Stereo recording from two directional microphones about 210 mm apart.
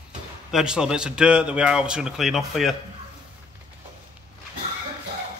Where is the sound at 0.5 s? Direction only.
5° right (ahead or behind).